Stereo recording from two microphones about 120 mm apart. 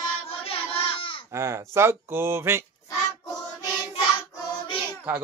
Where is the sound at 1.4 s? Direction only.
20° right (ahead or behind).